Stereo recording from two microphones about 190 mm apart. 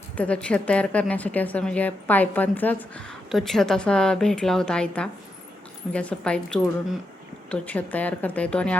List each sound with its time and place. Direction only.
0.2 s a woman's voice: 5° left (ahead or behind)